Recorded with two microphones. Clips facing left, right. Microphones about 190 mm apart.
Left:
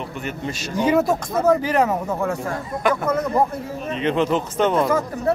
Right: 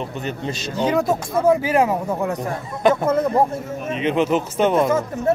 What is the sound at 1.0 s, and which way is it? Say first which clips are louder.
Speech: right 1 dB; 10° right (ahead or behind).